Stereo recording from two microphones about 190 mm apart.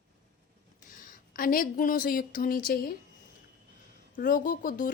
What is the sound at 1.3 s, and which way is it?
A woman's voice, 50° left (ahead or behind).